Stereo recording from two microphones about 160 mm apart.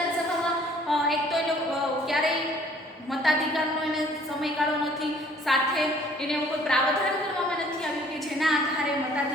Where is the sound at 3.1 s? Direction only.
Centre (ahead or behind).